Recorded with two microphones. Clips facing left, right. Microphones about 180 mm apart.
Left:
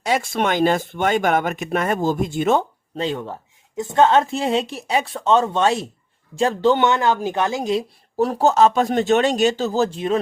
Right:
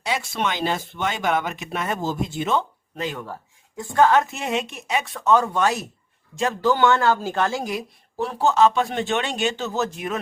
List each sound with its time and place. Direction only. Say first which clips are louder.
0.0 s speech: left 5 dB; 50° left (ahead or behind)
2.9 s a woman's voice: left 5 dB; 30° left (ahead or behind)
8.1 s speech: left 4 dB; 40° left (ahead or behind)